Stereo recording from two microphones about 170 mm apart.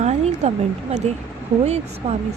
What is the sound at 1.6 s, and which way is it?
Speech, 40° right (ahead or behind).